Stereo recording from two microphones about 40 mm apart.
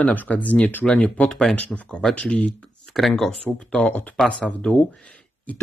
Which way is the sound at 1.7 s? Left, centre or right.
Centre.